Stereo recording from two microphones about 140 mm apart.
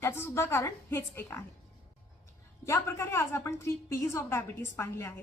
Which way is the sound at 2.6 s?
20° left (ahead or behind).